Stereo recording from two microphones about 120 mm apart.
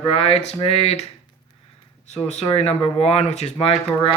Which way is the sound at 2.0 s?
65° left (ahead or behind).